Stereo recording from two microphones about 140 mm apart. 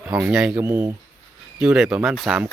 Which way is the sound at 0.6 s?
20° right (ahead or behind).